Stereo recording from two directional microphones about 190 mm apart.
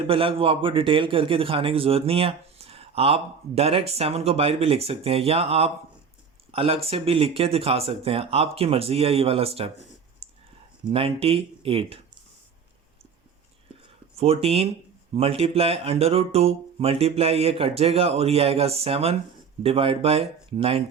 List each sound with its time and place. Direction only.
0.1 s a man's voice: 30° right (ahead or behind)
10.2 s a sound: 30° right (ahead or behind)
10.8 s speech: 30° right (ahead or behind)
14.2 s a man's voice: 30° right (ahead or behind)